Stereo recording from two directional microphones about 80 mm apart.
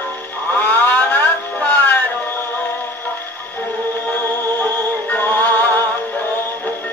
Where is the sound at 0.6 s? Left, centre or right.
Left.